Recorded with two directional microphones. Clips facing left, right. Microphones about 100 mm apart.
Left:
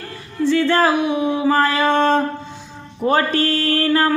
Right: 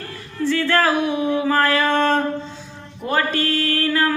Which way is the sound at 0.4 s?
20° left (ahead or behind).